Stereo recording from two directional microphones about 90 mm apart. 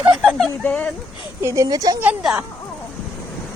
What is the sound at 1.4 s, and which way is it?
Speech, 30° right (ahead or behind).